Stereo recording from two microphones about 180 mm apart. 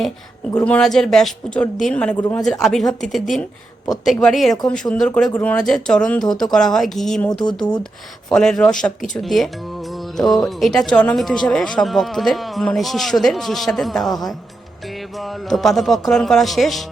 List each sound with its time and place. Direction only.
0.5 s a man's voice: 5° left (ahead or behind)
7.3 s speech: 25° left (ahead or behind)
8.3 s a man's voice: 5° left (ahead or behind)
15.2 s a man's voice: centre (ahead or behind)